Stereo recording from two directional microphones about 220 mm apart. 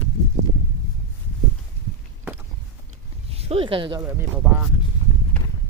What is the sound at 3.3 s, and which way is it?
Speech, 25° right (ahead or behind).